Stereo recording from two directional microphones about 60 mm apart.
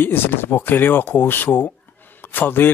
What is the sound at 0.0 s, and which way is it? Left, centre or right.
Speech, left.